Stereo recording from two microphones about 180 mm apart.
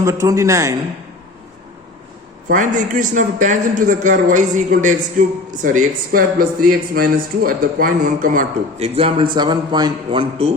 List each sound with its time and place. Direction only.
0.0 s a man's voice: 15° right (ahead or behind)
2.5 s a man's voice: 45° right (ahead or behind)
9.0 s a man's voice: 30° right (ahead or behind)